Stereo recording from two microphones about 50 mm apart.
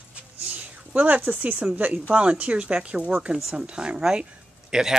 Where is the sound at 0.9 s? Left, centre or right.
Right.